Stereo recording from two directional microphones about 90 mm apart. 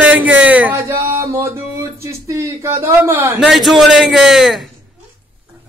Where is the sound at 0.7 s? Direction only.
30° right (ahead or behind).